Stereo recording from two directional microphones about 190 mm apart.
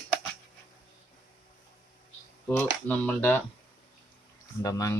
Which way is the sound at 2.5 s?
5° left (ahead or behind).